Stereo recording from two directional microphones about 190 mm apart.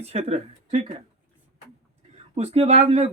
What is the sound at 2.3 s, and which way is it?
Speech, 30° right (ahead or behind).